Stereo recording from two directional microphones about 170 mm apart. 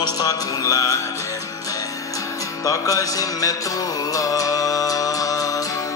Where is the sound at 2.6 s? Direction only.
20° left (ahead or behind).